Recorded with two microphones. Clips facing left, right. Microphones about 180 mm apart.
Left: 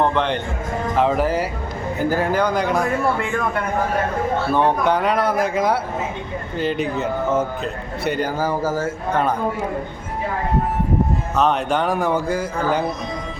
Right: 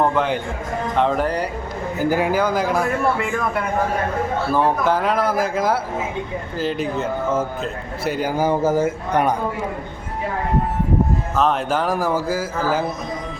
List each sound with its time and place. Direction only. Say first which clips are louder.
0.0 s speech: even; 5° right (ahead or behind)
2.0 s speech: right 1 dB; 10° right (ahead or behind)
8.4 s speech: right 4 dB; 20° right (ahead or behind)
11.3 s speech: left 1 dB; centre (ahead or behind)